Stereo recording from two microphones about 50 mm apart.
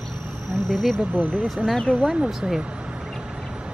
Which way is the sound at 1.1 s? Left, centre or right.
Right.